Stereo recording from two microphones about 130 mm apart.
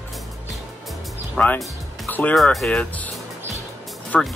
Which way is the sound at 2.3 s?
Centre (ahead or behind).